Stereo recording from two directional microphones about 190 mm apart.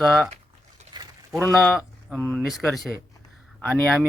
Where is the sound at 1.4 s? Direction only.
5° left (ahead or behind).